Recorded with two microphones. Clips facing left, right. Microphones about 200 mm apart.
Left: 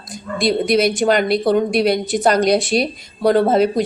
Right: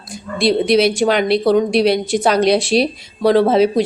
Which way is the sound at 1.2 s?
45° left (ahead or behind).